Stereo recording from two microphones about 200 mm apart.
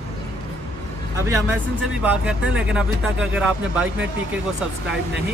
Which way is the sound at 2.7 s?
5° right (ahead or behind).